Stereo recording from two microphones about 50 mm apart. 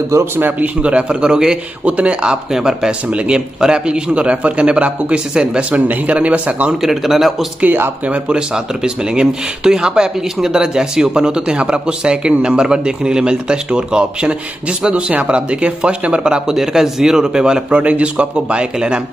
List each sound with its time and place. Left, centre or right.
0.6 s a man's voice: right
2.5 s a man's voice: centre; by 6.7 s right
6.8 s speech: centre
7.6 s speech: right
8.8 s speech: centre
17.7 s a man's voice: right